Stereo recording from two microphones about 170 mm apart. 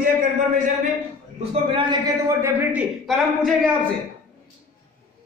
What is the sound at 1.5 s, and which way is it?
Speech, 30° right (ahead or behind).